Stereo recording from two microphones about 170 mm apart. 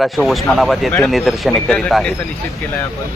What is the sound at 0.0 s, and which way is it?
A man's voice, centre (ahead or behind).